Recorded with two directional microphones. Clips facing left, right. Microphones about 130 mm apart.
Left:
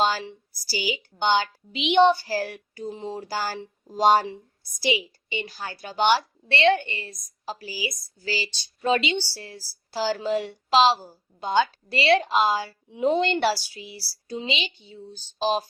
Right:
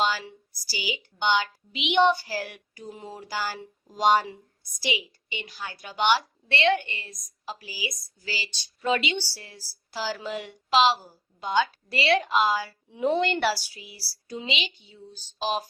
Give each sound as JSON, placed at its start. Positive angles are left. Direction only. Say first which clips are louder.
{"t": 0.0, "sound": "a woman's voice", "louder": "left 3 dB", "side_deg": 35}